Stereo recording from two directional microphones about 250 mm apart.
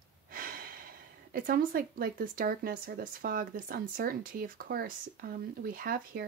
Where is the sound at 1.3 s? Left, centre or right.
Right.